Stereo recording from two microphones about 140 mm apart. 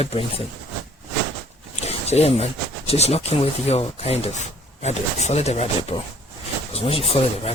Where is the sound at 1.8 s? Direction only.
50° left (ahead or behind).